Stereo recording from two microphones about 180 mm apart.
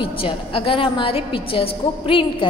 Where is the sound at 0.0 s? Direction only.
30° left (ahead or behind).